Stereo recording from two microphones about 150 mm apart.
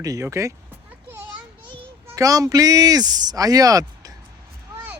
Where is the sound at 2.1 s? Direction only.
20° right (ahead or behind).